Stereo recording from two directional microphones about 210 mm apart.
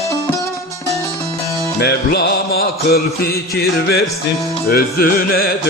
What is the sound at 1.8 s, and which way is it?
Music, 50° left (ahead or behind).